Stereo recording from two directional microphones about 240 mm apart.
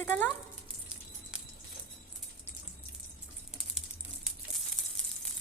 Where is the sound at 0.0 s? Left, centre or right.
Centre.